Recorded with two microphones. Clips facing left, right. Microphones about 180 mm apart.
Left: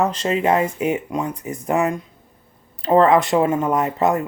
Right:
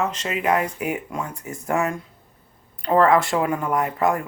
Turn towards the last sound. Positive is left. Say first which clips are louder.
# left 3 dB
turn(degrees=20)  # may be behind; listen again after turning